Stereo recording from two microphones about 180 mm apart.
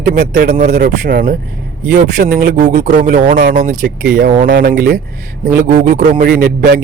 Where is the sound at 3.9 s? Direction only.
60° right (ahead or behind).